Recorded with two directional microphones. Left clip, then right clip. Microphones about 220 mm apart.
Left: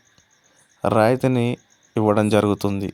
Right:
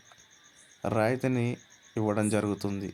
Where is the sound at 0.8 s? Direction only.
35° left (ahead or behind).